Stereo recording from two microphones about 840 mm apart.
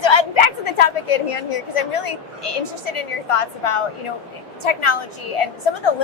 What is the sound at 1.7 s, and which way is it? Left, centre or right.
A woman's voice, left.